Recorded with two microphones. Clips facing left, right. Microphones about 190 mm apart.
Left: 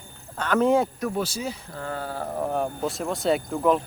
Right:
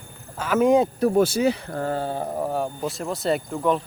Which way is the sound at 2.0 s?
20° right (ahead or behind).